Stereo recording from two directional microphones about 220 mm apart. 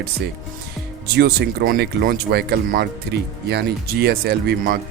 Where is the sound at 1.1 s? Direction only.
45° right (ahead or behind).